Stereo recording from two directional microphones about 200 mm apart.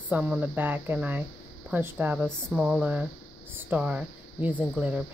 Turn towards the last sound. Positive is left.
turn(degrees=-5)  # may be behind; listen again after turning